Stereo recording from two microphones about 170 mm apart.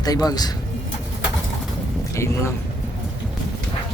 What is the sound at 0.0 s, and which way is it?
Speech, 20° left (ahead or behind).